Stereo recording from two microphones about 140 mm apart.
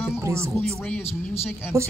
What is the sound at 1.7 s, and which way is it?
Speech, 20° right (ahead or behind).